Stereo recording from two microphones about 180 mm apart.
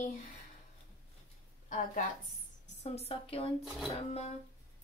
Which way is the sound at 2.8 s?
35° left (ahead or behind).